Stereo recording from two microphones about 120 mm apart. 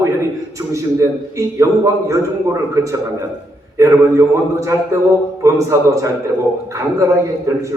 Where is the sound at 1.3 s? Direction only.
25° right (ahead or behind).